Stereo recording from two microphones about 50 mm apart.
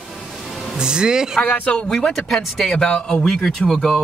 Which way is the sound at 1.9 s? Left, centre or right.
Centre.